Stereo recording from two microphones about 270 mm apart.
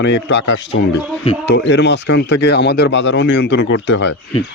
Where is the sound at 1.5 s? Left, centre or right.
Left.